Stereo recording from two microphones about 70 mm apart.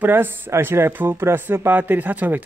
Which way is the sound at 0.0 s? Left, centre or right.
Right.